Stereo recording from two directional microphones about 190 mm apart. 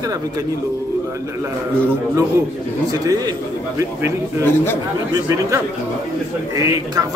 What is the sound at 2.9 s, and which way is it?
Speech, 20° right (ahead or behind).